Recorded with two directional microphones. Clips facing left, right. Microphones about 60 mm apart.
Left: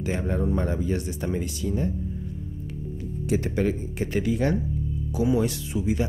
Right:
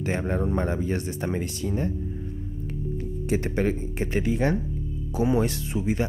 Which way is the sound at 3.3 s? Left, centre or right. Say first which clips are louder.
Even; right.